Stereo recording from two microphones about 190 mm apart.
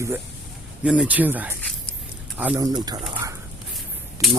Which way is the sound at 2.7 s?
20° right (ahead or behind).